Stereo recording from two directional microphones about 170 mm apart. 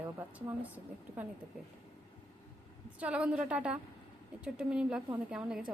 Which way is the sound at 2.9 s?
5° right (ahead or behind).